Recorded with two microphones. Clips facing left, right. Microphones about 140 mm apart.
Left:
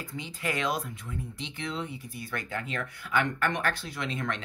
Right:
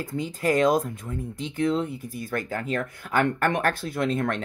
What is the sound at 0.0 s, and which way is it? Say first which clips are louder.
Speech: right 9 dB; 45° right (ahead or behind).